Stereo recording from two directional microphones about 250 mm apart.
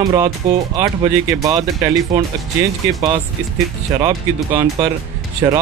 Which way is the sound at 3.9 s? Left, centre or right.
Centre.